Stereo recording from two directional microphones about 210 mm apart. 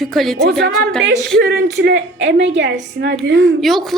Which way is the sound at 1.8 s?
60° right (ahead or behind).